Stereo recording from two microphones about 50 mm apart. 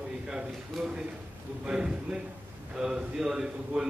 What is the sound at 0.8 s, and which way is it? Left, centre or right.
Speech, centre.